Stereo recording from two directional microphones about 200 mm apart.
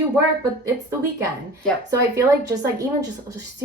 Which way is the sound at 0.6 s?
15° right (ahead or behind).